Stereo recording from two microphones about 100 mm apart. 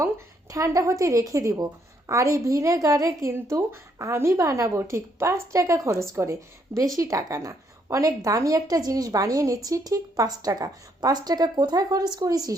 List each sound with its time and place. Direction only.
0.5 s a woman's voice: 35° right (ahead or behind)